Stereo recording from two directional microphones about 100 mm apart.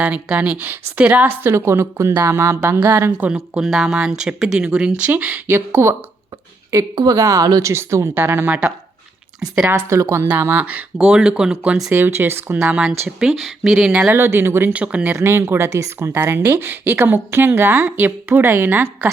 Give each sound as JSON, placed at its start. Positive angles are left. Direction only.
{"t": 0.0, "sound": "speech", "side_deg": -15}
{"t": 3.3, "sound": "speech", "side_deg": -5}
{"t": 6.7, "sound": "a woman's voice", "side_deg": -35}
{"t": 11.9, "sound": "speech", "side_deg": -20}
{"t": 13.1, "sound": "speech", "side_deg": -5}
{"t": 14.1, "sound": "speech", "side_deg": -25}
{"t": 15.1, "sound": "speech", "side_deg": -25}